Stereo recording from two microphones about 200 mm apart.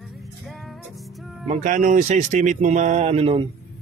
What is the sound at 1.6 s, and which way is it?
Speech, 40° right (ahead or behind).